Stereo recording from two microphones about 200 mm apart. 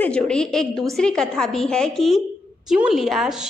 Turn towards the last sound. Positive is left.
turn(degrees=0)  # may be behind; listen again after turning